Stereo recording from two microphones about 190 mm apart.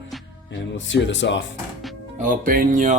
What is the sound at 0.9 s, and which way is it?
Speech, 70° left (ahead or behind).